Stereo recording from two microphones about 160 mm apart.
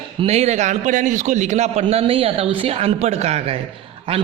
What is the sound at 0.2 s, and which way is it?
A man's voice, 40° right (ahead or behind).